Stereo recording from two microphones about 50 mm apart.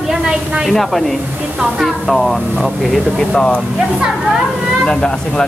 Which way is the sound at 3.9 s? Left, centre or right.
Centre.